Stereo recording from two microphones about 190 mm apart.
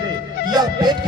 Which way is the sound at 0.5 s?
20° right (ahead or behind).